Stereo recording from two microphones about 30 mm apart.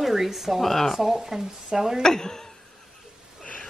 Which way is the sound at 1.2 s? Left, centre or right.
Centre.